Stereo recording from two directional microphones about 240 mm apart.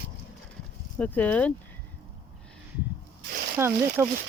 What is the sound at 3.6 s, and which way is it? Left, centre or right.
Speech, centre.